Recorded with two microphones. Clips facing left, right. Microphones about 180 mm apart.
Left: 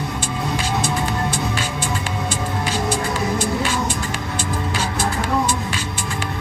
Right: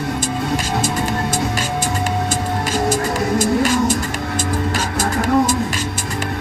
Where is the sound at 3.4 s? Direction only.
45° right (ahead or behind).